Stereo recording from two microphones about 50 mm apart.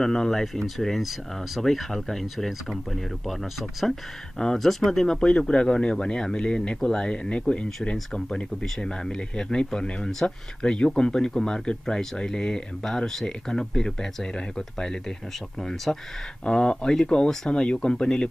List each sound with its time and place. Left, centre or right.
0.0 s speech: centre
15.7 s speech: centre
16.4 s speech: centre